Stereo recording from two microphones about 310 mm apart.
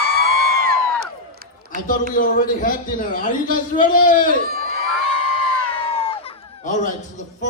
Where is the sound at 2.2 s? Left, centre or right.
Left.